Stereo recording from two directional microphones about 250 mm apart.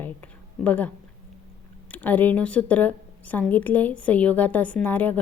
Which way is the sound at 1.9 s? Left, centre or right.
Centre.